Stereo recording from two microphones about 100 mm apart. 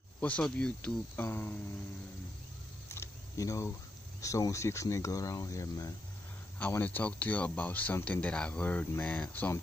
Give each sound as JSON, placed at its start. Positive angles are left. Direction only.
{"t": 0.2, "sound": "speech", "side_deg": 10}
{"t": 1.1, "sound": "speech", "side_deg": 20}
{"t": 2.9, "sound": "camera", "side_deg": 30}
{"t": 4.2, "sound": "speech", "side_deg": 30}
{"t": 6.7, "sound": "speech", "side_deg": 20}